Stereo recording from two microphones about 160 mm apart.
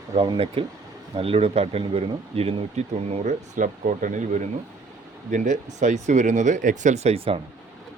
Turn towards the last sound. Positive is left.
turn(degrees=-40)  # may be behind; listen again after turning